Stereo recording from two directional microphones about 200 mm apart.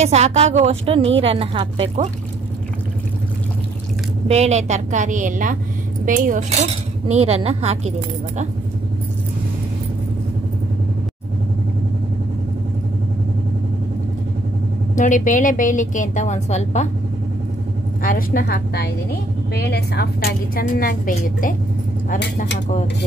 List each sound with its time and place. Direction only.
0.0 s a woman's voice: 35° right (ahead or behind)
4.3 s speech: 35° right (ahead or behind)
15.0 s a woman's voice: 40° left (ahead or behind)
18.0 s a woman's voice: 45° left (ahead or behind)